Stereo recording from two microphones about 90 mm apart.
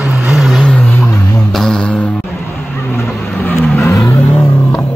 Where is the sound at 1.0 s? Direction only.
5° left (ahead or behind).